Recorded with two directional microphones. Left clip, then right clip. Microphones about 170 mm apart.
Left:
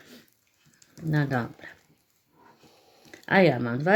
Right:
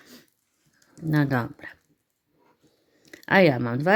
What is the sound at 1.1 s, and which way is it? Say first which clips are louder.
Speech: right 3 dB; 35° right (ahead or behind).